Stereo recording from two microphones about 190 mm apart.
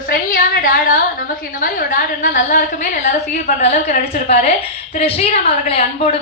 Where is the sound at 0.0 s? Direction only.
50° left (ahead or behind).